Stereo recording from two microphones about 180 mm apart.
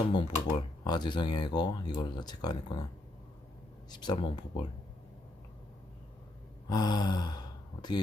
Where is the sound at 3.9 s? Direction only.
25° left (ahead or behind).